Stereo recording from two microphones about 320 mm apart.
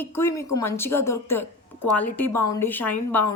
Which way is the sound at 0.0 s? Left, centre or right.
Centre.